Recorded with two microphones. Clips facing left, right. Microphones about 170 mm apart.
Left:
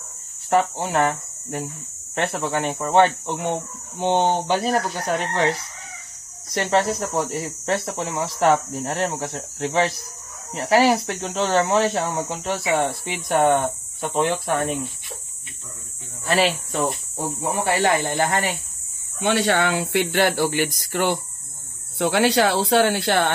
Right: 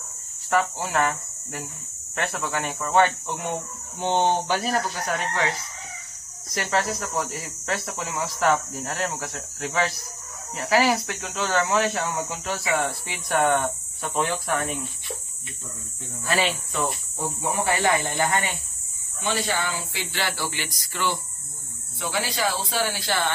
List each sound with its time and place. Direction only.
0.5 s speech: 25° left (ahead or behind)
6.5 s speech: 25° left (ahead or behind)
16.4 s speech: 40° left (ahead or behind)
17.2 s speech: 5° left (ahead or behind)
19.1 s speech: 70° left (ahead or behind)
21.9 s speech: 65° left (ahead or behind)